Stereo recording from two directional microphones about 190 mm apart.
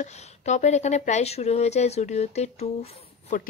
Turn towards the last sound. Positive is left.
turn(degrees=35)  # may be behind; listen again after turning